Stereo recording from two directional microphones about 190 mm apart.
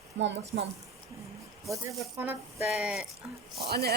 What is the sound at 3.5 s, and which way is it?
Speech, 55° right (ahead or behind).